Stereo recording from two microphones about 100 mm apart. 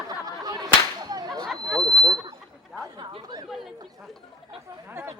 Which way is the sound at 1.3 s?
5° left (ahead or behind).